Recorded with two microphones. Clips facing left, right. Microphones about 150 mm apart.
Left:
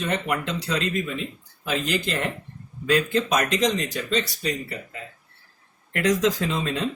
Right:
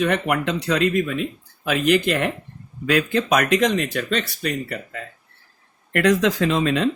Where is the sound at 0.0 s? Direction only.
60° right (ahead or behind).